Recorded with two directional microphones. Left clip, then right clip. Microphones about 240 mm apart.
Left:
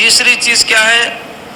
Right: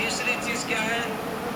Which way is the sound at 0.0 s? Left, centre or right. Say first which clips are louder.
Left 17 dB; left.